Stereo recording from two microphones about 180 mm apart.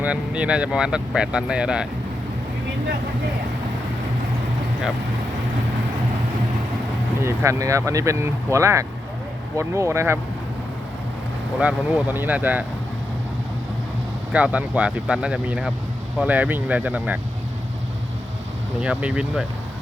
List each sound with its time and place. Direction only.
0.0 s speech: 5° right (ahead or behind)
7.2 s speech: 15° right (ahead or behind)
11.6 s speech: 10° right (ahead or behind)
14.3 s speech: 5° right (ahead or behind)
18.8 s speech: 5° right (ahead or behind)